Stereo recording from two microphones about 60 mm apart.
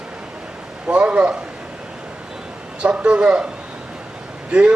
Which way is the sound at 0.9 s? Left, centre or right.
Centre.